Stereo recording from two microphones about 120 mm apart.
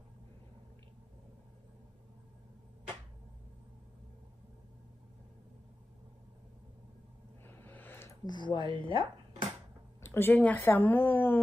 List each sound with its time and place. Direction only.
7.4 s a sound: 15° left (ahead or behind)
8.3 s speech: 40° left (ahead or behind)
10.0 s a woman's voice: 20° left (ahead or behind)